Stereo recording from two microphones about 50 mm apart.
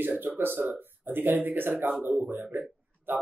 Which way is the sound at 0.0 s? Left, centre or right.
Right.